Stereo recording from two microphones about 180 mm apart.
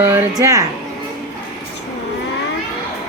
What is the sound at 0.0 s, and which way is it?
Speech, 10° right (ahead or behind).